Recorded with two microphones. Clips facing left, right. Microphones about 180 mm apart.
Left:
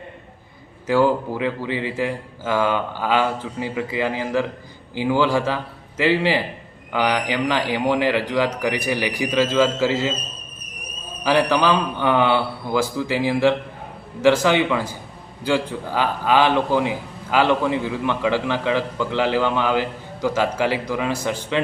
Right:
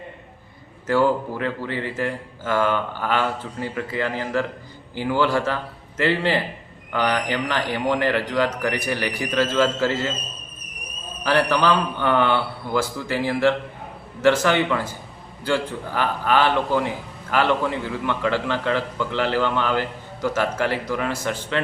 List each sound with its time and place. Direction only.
0.9 s a man's voice: 15° left (ahead or behind)
11.2 s a man's voice: 15° left (ahead or behind)